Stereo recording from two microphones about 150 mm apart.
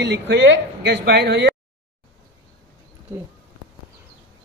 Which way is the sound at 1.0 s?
90° right.